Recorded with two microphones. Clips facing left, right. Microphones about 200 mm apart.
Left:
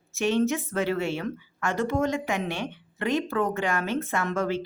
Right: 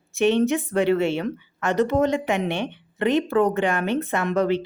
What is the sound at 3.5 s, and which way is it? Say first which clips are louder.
Speech: right 5 dB; 20° right (ahead or behind).